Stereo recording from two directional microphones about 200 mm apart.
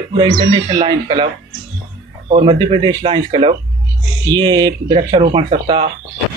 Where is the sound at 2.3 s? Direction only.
25° right (ahead or behind).